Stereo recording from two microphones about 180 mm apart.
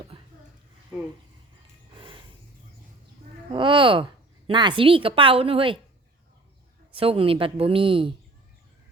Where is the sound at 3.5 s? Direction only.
30° right (ahead or behind).